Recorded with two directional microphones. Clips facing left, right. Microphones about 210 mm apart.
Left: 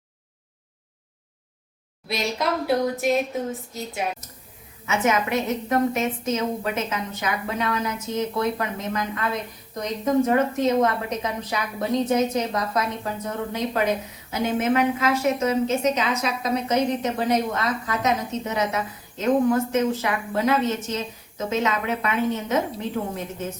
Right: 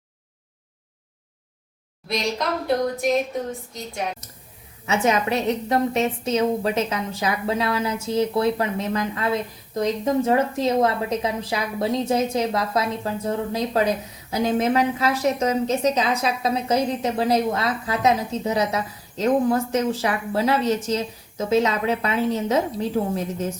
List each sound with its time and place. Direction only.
2.6 s a woman's voice: 5° left (ahead or behind)
4.9 s a woman's voice: 30° right (ahead or behind)